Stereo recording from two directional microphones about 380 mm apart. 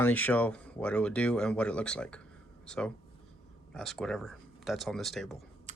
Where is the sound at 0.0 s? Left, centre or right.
Centre.